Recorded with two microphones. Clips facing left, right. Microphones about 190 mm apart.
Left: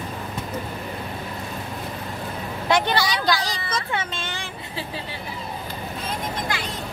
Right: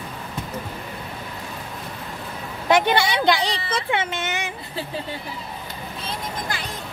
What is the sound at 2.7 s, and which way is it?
Speech, 15° right (ahead or behind).